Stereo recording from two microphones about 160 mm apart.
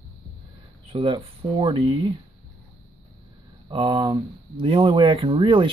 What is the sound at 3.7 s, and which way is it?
Speech, 30° right (ahead or behind).